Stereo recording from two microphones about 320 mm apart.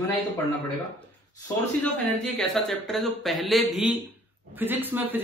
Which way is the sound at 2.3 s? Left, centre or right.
Centre.